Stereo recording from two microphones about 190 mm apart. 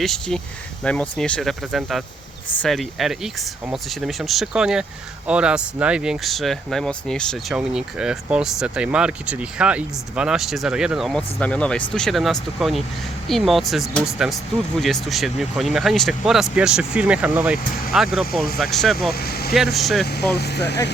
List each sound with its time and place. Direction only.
0.0 s speech: centre (ahead or behind)
18.9 s speech: 55° left (ahead or behind)
19.5 s speech: centre (ahead or behind)
20.3 s speech: 60° left (ahead or behind)